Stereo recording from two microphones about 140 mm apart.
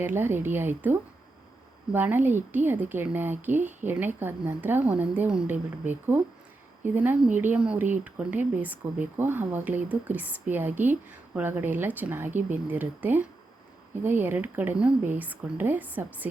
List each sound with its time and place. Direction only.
0.0 s speech: 15° right (ahead or behind)